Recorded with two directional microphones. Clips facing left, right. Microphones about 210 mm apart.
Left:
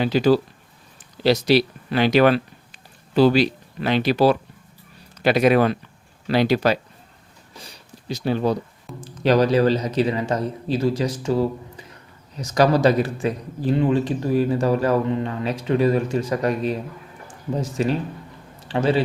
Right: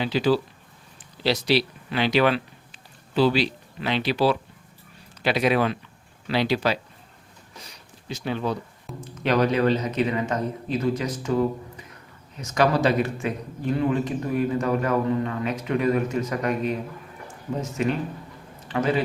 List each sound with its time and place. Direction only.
0.0 s speech: 45° left (ahead or behind)
7.5 s a sound: 30° left (ahead or behind)
9.0 s a man's voice: 35° left (ahead or behind)